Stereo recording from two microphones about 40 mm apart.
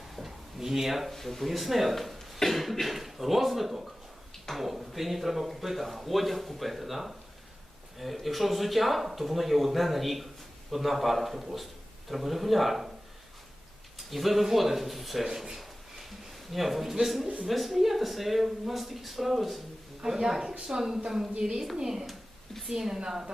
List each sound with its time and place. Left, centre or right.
0.2 s drawer open or close: centre
1.1 s speech: centre
14.1 s speech: centre
15.3 s a sound: centre
17.4 s speech: centre
20.0 s a woman's voice: centre
23.0 s a woman's voice: centre